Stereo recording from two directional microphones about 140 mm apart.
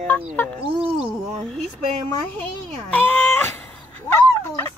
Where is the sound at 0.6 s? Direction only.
40° right (ahead or behind).